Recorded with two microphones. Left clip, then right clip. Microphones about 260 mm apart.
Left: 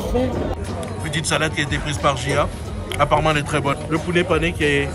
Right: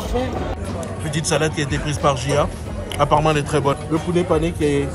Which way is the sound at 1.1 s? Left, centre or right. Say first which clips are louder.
Right 1 dB; centre.